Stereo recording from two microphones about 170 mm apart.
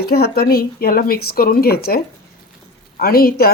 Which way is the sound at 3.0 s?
60° left (ahead or behind).